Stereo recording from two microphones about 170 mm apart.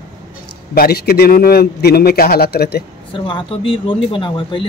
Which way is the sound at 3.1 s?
30° left (ahead or behind).